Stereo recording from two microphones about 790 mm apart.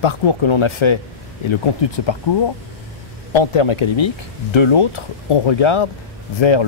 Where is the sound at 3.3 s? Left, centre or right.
Left.